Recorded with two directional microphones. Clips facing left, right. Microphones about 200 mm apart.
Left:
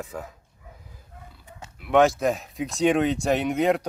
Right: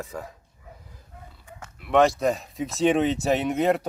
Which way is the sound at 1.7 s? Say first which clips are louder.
Left 1 dB; centre (ahead or behind).